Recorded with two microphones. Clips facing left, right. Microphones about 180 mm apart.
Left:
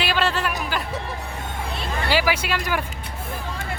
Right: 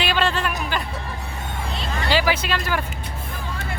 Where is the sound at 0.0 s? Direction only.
5° left (ahead or behind).